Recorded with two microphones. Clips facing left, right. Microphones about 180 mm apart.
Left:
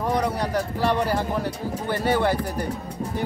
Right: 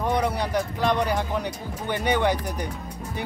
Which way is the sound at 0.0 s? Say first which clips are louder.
Left 1 dB; centre (ahead or behind).